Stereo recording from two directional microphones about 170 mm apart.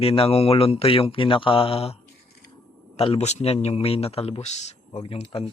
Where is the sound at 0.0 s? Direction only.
35° left (ahead or behind).